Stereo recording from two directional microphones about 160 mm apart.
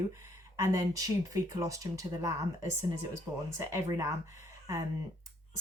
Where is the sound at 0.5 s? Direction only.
20° right (ahead or behind).